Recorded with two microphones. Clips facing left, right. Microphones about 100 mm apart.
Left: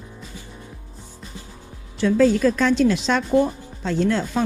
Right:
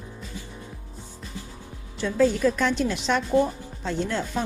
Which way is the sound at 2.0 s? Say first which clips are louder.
Left 4 dB; 90° left.